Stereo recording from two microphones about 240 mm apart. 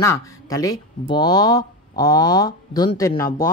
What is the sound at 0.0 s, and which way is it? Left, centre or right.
Speech, centre.